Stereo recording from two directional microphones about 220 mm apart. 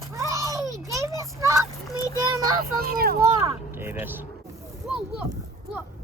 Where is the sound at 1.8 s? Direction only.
15° left (ahead or behind).